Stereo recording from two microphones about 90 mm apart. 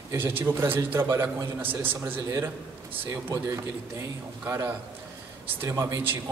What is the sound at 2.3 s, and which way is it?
A man's voice, 35° right (ahead or behind).